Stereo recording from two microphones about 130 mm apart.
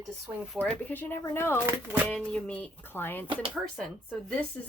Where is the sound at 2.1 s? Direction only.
5° left (ahead or behind).